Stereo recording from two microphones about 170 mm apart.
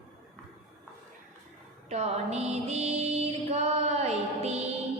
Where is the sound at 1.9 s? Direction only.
40° right (ahead or behind).